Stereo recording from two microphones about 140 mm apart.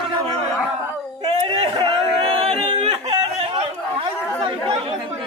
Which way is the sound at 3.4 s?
45° right (ahead or behind).